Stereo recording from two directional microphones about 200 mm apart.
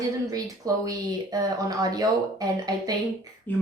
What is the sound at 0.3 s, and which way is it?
A woman's voice, 15° right (ahead or behind).